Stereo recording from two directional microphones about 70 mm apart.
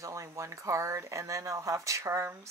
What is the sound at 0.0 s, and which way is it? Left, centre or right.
Speech, right.